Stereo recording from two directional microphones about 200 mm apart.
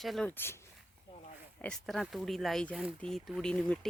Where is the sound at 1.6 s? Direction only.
5° left (ahead or behind).